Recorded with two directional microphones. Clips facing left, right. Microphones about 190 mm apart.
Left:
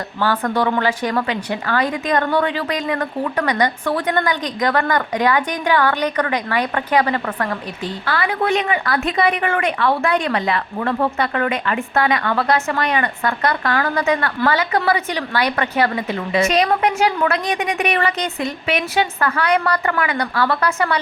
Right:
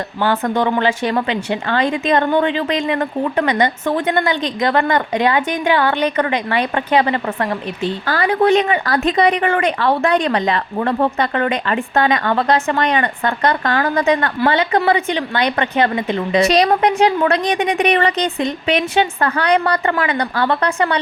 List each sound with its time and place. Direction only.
0.2 s a woman's voice: 20° right (ahead or behind)
8.0 s a woman's voice: 35° right (ahead or behind)